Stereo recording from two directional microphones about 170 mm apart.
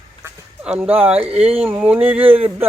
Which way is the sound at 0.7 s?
10° right (ahead or behind).